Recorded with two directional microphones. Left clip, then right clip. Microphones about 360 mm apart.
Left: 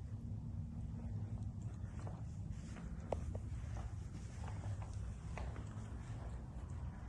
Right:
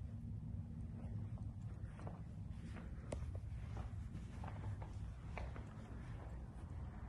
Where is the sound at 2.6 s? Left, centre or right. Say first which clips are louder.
Even; centre.